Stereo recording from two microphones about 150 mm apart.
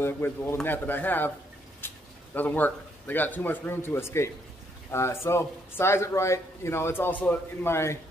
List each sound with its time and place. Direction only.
0.0 s speech: 15° left (ahead or behind)
1.8 s a sound: 15° left (ahead or behind)
2.3 s speech: 10° left (ahead or behind)